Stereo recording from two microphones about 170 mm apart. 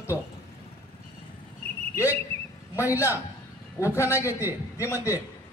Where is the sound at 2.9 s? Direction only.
15° left (ahead or behind).